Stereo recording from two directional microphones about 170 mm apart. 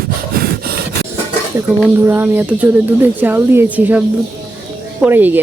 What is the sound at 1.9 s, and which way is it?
Speech, 15° right (ahead or behind).